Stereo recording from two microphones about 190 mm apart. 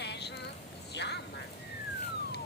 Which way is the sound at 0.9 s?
65° left (ahead or behind).